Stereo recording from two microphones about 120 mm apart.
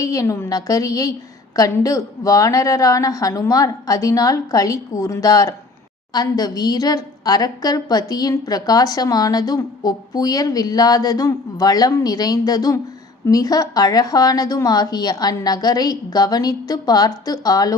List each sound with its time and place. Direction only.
0.0 s a woman's voice: 30° left (ahead or behind)